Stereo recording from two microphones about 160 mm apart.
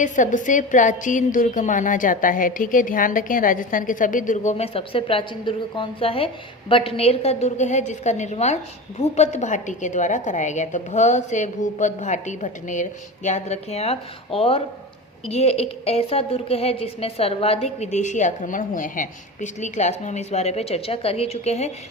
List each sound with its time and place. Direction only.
0.0 s a woman's voice: 50° left (ahead or behind)
4.5 s a woman's voice: 35° left (ahead or behind)